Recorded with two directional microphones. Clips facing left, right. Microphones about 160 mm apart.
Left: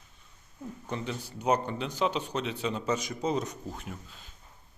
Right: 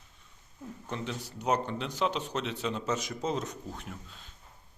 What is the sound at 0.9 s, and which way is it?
Speech, centre (ahead or behind).